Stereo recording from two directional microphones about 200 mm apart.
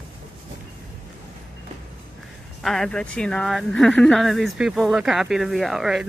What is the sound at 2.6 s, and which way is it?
Speech, centre (ahead or behind).